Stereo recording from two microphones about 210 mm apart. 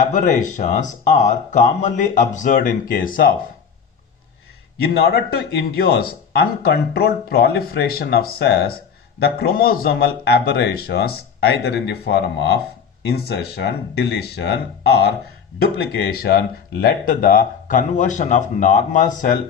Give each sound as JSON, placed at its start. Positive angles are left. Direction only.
{"t": 0.0, "sound": "speech", "side_deg": 35}
{"t": 4.8, "sound": "a man's voice", "side_deg": 50}